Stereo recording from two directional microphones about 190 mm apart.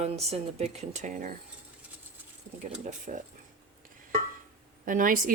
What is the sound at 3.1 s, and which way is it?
Speech, 40° right (ahead or behind).